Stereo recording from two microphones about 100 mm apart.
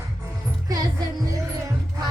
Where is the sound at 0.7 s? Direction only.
45° right (ahead or behind).